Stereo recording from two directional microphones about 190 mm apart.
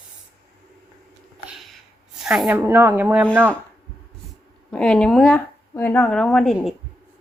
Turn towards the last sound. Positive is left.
turn(degrees=0)  # may be behind; listen again after turning